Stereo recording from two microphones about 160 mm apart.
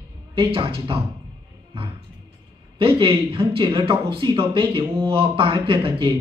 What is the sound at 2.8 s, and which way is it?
Speech, 35° right (ahead or behind).